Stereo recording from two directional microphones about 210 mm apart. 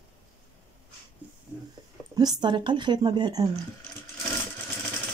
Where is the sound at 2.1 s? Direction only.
20° right (ahead or behind).